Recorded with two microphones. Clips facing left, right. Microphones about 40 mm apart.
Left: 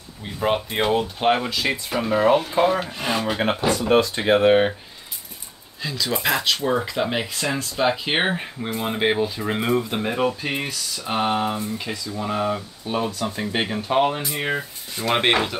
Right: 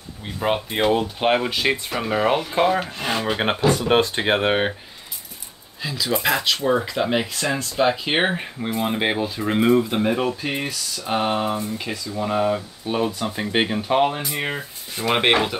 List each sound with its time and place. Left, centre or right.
0.2 s speech: centre
3.3 s speech: right
4.2 s speech: centre
5.8 s speech: centre